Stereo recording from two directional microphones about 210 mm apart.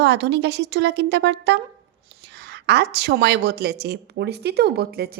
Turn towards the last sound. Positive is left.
turn(degrees=-50)  # may be behind; listen again after turning